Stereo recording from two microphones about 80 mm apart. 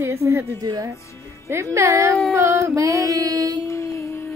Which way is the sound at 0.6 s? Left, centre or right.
Right.